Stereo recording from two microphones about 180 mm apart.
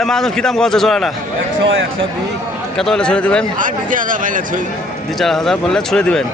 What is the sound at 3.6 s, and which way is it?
Speech, 50° right (ahead or behind).